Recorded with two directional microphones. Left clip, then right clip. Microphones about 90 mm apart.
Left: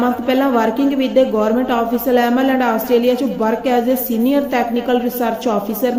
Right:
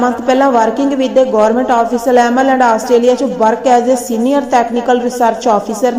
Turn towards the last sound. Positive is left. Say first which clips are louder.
# right 6 dB
turn(degrees=25)  # may be behind; listen again after turning